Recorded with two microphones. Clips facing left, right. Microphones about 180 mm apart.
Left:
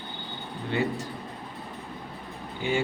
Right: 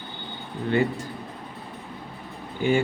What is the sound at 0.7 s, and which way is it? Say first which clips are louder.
Speech: right 5 dB; 55° right (ahead or behind).